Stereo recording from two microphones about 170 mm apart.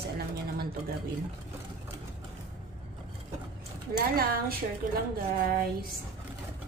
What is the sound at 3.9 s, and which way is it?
A woman's voice, 60° right (ahead or behind).